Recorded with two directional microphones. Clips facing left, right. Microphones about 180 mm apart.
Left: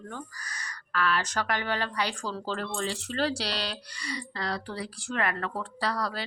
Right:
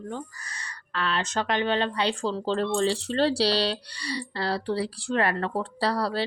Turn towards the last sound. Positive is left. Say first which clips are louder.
# right 5 dB
turn(degrees=-30)  # may be behind; listen again after turning